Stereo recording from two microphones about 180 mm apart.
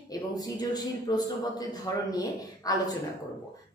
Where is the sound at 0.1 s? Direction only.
20° left (ahead or behind).